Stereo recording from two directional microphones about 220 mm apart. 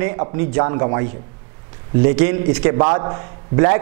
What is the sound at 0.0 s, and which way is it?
A man's voice, 15° right (ahead or behind).